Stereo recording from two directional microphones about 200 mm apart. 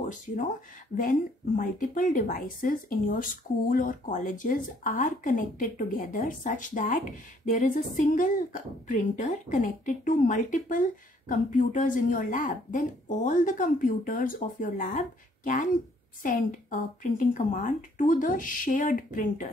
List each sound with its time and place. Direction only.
1.6 s speech: 40° left (ahead or behind)